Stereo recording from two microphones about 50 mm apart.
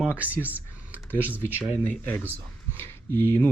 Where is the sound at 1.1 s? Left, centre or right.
Left.